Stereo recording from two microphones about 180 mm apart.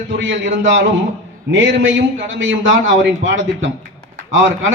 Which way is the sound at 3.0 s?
90° right.